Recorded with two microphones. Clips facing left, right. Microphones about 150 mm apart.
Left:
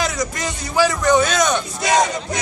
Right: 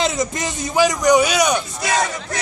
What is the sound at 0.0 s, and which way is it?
A man's voice, 20° right (ahead or behind).